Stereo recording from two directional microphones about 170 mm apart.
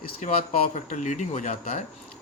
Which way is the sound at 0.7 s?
45° left (ahead or behind).